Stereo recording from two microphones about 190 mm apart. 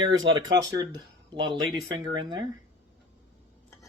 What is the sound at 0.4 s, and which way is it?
Speech, 20° right (ahead or behind).